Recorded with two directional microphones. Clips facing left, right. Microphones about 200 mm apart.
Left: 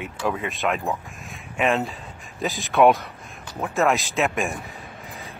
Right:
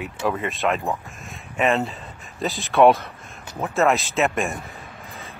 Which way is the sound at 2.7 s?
15° left (ahead or behind).